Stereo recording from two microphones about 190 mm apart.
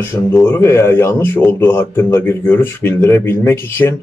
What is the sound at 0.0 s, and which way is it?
Speech, 10° left (ahead or behind).